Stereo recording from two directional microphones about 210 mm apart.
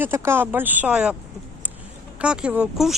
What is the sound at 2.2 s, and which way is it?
Speech, 5° right (ahead or behind).